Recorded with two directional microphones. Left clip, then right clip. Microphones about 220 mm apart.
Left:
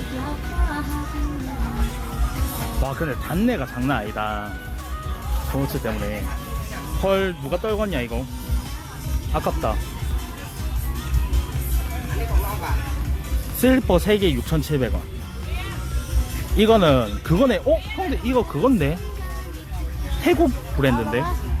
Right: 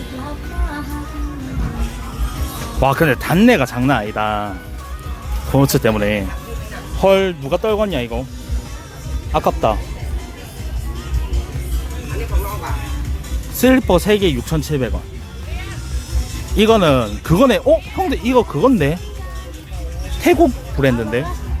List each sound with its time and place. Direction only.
2.8 s speech: 45° right (ahead or behind)
5.6 s speech: 50° right (ahead or behind)
7.0 s speech: 20° right (ahead or behind)
9.3 s speech: 20° right (ahead or behind)
13.6 s speech: 20° right (ahead or behind)
16.6 s speech: 15° right (ahead or behind)
20.2 s speech: 15° right (ahead or behind)